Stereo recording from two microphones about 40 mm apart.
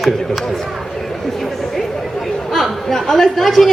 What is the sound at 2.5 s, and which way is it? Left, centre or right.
Speech, centre.